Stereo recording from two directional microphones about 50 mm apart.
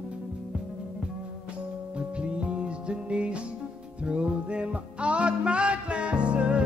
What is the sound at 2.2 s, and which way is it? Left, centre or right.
Music, right.